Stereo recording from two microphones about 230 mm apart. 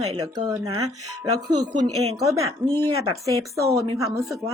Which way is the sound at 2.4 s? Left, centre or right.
Centre.